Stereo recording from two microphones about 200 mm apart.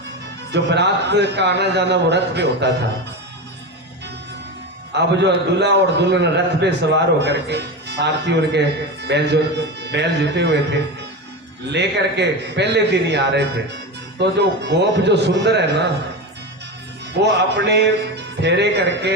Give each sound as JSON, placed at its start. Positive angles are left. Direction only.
{"t": 0.5, "sound": "a man's voice", "side_deg": -60}
{"t": 4.9, "sound": "a man's voice", "side_deg": -60}
{"t": 17.2, "sound": "a man's voice", "side_deg": -60}